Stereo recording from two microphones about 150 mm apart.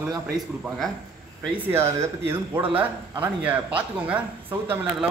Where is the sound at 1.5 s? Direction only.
15° right (ahead or behind).